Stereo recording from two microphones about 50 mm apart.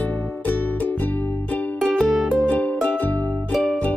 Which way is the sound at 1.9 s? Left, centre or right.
Centre.